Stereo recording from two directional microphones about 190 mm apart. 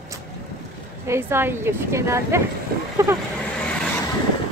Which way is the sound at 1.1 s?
15° right (ahead or behind).